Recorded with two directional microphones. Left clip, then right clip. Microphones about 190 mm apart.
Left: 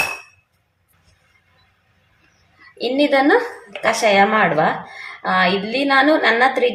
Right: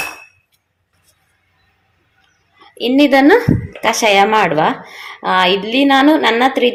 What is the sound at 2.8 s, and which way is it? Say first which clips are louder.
A woman's voice: right 5 dB; 30° right (ahead or behind).